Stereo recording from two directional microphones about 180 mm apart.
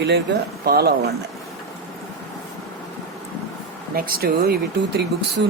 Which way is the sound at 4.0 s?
55° right (ahead or behind).